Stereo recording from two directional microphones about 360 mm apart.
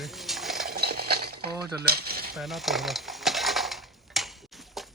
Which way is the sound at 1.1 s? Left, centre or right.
Right.